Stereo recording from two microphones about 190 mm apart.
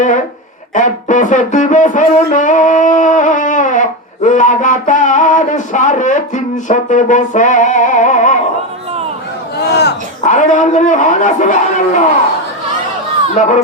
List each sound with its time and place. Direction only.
0.7 s music: 40° left (ahead or behind)
9.6 s a sound: 60° left (ahead or behind)
10.2 s music: 40° left (ahead or behind)
13.4 s music: 40° left (ahead or behind)